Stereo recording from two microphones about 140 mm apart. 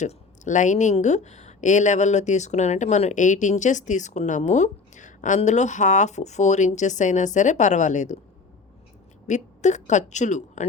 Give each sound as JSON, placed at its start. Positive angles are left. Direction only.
{"t": 0.0, "sound": "speech", "side_deg": 60}
{"t": 9.2, "sound": "speech", "side_deg": 55}